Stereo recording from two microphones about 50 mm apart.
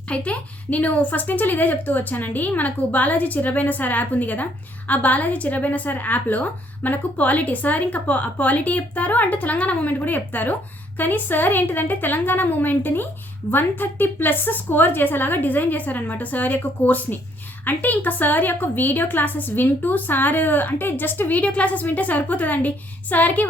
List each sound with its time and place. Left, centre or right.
0.1 s a woman's voice: left
21.4 s a woman's voice: left